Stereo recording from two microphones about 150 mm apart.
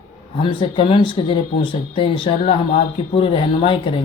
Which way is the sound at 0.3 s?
35° left (ahead or behind).